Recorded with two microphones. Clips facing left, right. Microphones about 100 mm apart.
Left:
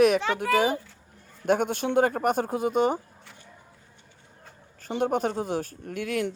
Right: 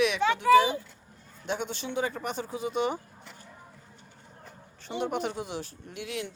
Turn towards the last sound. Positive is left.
turn(degrees=50)  # may be behind; listen again after turning